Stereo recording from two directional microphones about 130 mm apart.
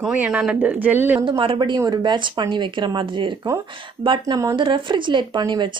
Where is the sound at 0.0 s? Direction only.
10° right (ahead or behind).